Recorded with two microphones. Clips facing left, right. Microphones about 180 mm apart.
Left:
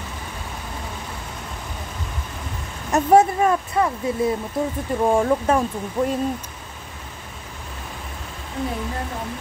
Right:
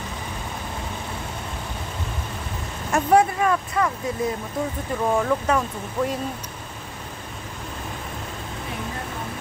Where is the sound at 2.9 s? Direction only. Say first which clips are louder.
Left 3 dB; 25° left (ahead or behind).